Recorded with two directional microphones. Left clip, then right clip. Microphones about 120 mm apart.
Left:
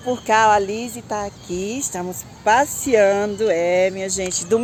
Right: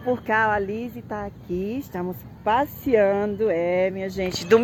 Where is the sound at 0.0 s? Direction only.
35° left (ahead or behind).